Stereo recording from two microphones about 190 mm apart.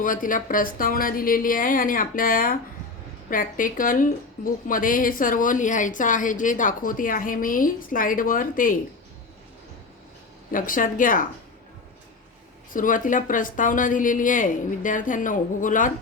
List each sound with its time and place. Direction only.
0.0 s speech: 45° left (ahead or behind)
10.5 s speech: 45° left (ahead or behind)
12.7 s speech: 45° left (ahead or behind)